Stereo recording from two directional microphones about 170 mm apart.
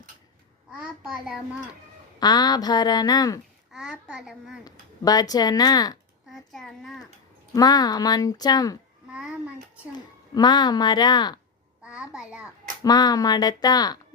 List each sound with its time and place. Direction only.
0.8 s a child's voice: 5° right (ahead or behind)
2.1 s a child's voice: 25° left (ahead or behind)
3.7 s a child's voice: centre (ahead or behind)
4.6 s a child's voice: 20° left (ahead or behind)
6.3 s a child's voice: centre (ahead or behind)
7.5 s a child's voice: 25° left (ahead or behind)
9.0 s a child's voice: 5° right (ahead or behind)
9.9 s a child's voice: 25° left (ahead or behind)
11.8 s a child's voice: 5° right (ahead or behind)
12.8 s a child's voice: 25° left (ahead or behind)